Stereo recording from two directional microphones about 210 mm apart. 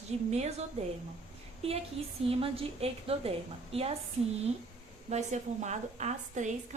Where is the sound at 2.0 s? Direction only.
30° right (ahead or behind).